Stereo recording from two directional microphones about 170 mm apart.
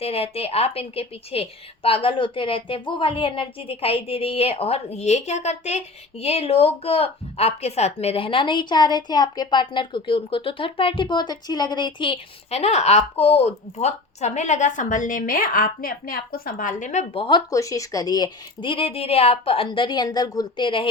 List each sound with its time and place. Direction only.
0.0 s a woman's voice: 35° left (ahead or behind)
17.2 s speech: 25° left (ahead or behind)